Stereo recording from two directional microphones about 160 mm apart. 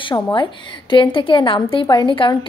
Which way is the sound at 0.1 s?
30° left (ahead or behind).